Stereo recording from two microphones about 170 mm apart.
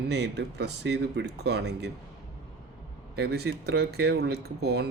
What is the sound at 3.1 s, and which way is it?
Speech, 75° right (ahead or behind).